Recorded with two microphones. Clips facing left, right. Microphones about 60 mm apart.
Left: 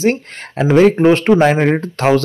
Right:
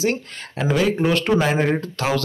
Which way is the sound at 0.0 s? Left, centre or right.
Left.